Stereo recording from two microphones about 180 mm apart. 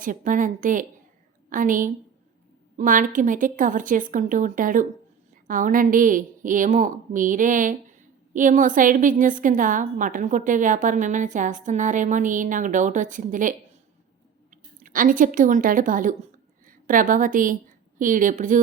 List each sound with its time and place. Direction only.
0.0 s a woman's voice: 45° right (ahead or behind)